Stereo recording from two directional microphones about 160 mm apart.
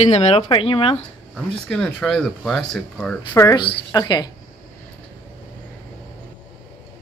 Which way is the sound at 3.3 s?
25° left (ahead or behind).